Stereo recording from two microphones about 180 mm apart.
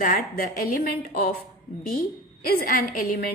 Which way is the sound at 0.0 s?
50° left (ahead or behind).